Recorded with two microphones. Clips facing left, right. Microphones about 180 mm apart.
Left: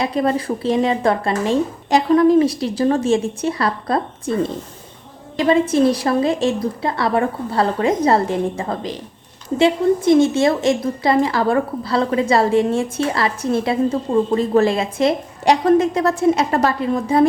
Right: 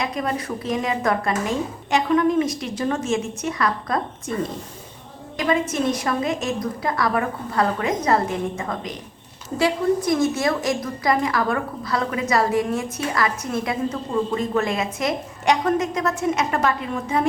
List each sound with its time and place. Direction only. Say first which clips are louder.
0.0 s speech: left 6 dB; 30° left (ahead or behind)
5.4 s a woman's voice: left 7 dB; 30° left (ahead or behind)